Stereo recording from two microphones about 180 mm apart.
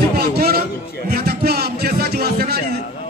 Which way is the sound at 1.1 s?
60° right (ahead or behind).